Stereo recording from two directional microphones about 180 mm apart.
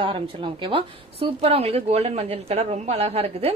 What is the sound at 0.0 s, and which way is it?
Speech, 30° right (ahead or behind).